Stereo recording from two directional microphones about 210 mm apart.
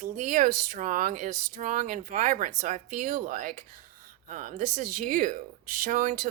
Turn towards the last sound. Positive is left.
turn(degrees=-40)  # may be behind; listen again after turning